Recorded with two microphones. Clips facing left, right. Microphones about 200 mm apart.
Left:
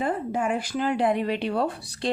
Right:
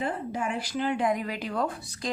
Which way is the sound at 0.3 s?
50° left (ahead or behind).